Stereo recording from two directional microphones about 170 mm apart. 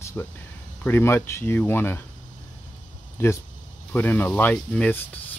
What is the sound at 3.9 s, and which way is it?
Speech, 10° left (ahead or behind).